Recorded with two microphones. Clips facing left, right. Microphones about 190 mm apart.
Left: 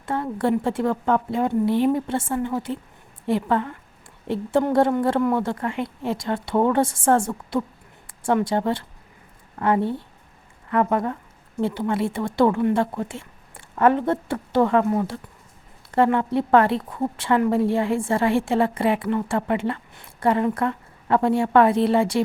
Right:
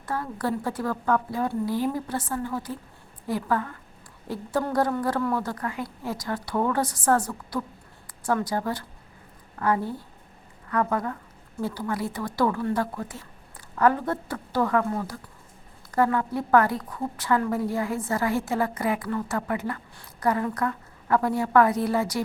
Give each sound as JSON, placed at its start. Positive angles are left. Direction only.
{"t": 0.0, "sound": "a woman's voice", "side_deg": 25}